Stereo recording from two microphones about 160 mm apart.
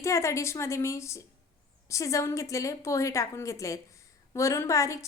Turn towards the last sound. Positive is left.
turn(degrees=20)  # may be behind; listen again after turning